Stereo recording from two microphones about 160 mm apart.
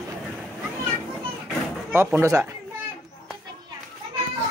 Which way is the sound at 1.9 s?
15° right (ahead or behind).